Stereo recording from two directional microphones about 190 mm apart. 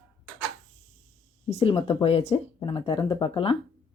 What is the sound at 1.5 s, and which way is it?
Speech, 30° left (ahead or behind).